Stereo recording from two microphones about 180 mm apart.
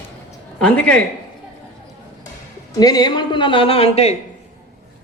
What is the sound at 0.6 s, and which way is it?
Speech, 5° left (ahead or behind).